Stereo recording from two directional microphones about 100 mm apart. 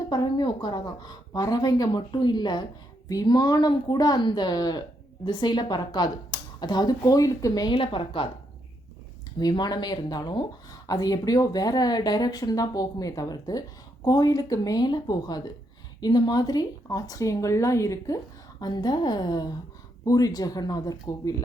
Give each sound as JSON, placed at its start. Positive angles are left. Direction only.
{"t": 0.1, "sound": "a woman's voice", "side_deg": 45}
{"t": 7.7, "sound": "a woman's voice", "side_deg": 60}
{"t": 9.4, "sound": "speech", "side_deg": 40}
{"t": 18.6, "sound": "a woman's voice", "side_deg": 45}